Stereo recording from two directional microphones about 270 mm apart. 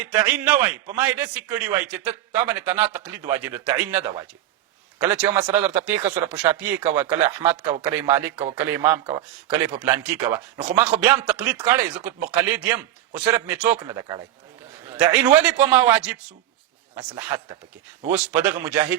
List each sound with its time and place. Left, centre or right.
0.0 s a man's voice: centre
9.8 s a man's voice: centre